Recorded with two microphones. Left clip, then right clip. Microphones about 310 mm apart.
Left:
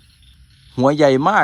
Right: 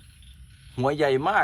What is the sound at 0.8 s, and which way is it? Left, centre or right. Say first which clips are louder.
Speech: left 9 dB; centre.